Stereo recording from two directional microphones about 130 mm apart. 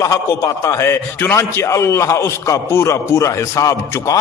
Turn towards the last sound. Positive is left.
turn(degrees=25)  # may be behind; listen again after turning